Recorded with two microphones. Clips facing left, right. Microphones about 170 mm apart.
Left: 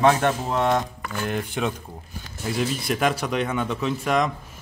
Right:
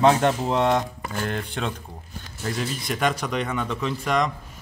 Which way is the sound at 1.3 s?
10° left (ahead or behind).